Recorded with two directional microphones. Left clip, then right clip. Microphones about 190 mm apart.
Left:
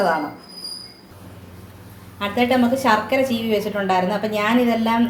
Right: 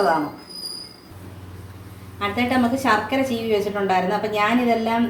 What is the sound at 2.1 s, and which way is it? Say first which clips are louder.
A woman's voice: left 3 dB; 50° left (ahead or behind).